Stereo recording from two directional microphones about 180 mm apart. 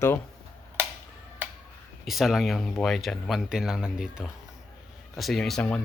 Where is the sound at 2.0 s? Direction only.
Centre (ahead or behind).